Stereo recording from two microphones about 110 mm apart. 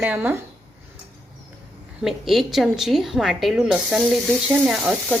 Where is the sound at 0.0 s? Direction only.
15° right (ahead or behind).